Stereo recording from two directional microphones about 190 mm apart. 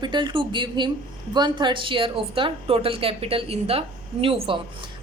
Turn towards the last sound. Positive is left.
turn(degrees=-30)  # may be behind; listen again after turning